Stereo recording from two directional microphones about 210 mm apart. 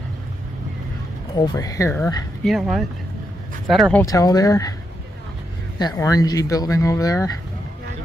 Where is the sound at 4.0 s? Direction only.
15° left (ahead or behind).